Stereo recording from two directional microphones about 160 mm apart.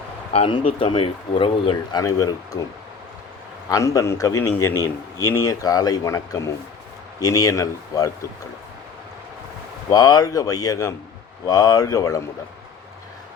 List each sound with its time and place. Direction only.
0.3 s speech: 35° left (ahead or behind)
3.7 s a man's voice: 20° left (ahead or behind)
9.9 s a man's voice: 25° left (ahead or behind)